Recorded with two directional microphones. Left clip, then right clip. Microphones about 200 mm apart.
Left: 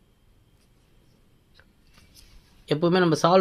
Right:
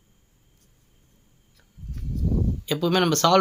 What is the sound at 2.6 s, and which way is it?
Speech, 10° left (ahead or behind).